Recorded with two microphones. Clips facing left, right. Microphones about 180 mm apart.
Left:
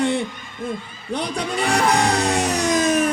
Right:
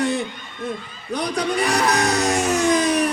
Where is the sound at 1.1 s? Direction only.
30° left (ahead or behind).